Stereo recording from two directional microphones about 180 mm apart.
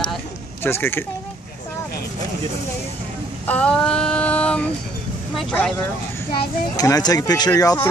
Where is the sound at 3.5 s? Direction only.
5° left (ahead or behind).